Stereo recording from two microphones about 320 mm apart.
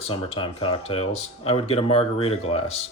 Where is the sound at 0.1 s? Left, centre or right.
Centre.